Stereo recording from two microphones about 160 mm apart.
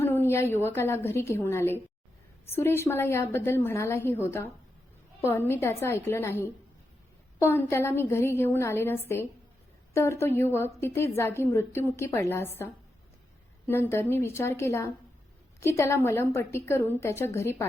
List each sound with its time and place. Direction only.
0.0 s a woman's voice: 15° left (ahead or behind)